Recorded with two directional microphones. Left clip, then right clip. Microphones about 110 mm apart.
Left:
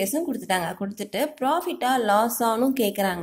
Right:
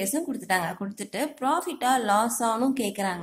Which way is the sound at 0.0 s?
20° left (ahead or behind).